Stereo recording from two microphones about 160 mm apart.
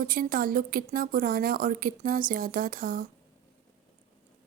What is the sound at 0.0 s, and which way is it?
Speech, 60° right (ahead or behind).